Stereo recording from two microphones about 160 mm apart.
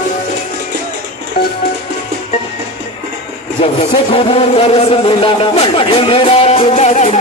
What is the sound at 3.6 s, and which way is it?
Speech, 40° left (ahead or behind).